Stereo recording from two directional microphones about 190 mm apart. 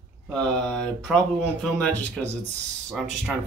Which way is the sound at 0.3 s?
5° left (ahead or behind).